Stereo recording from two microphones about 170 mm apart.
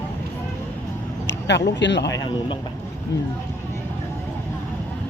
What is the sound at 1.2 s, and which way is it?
Speech, 90° left.